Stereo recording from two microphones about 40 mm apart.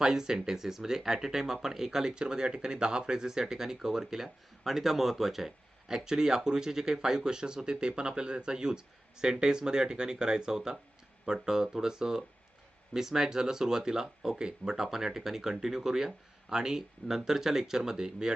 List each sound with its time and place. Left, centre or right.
0.0 s speech: centre